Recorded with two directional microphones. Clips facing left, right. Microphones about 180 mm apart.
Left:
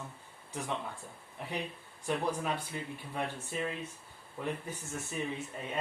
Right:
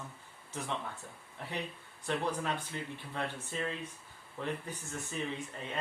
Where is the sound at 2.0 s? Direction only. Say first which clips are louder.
Left 1 dB; 10° left (ahead or behind).